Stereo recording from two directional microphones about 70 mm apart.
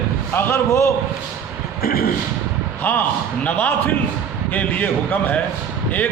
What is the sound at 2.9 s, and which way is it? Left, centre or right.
A man's voice, left.